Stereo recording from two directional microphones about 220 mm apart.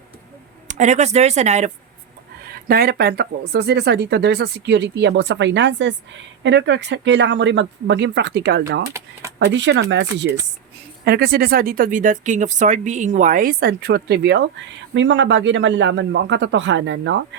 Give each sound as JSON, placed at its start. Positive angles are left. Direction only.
{"t": 0.7, "sound": "speech", "side_deg": -30}
{"t": 2.5, "sound": "speech", "side_deg": -45}